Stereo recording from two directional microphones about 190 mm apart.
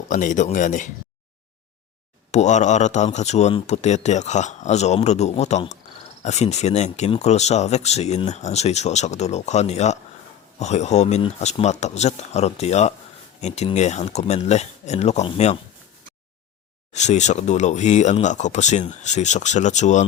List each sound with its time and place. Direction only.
0.1 s speech: 40° left (ahead or behind)
2.3 s speech: 35° left (ahead or behind)
16.9 s speech: 35° left (ahead or behind)